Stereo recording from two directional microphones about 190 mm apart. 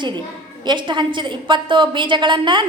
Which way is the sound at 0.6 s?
25° right (ahead or behind).